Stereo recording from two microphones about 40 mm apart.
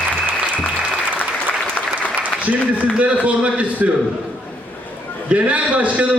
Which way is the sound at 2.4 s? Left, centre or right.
Right.